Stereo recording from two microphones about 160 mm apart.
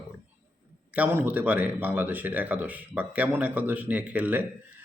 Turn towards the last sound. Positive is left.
turn(degrees=-10)  # may be behind; listen again after turning